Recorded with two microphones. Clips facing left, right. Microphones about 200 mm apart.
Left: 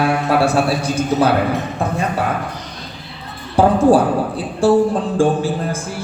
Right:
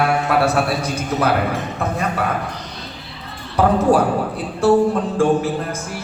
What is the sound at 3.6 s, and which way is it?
Speech, 30° left (ahead or behind).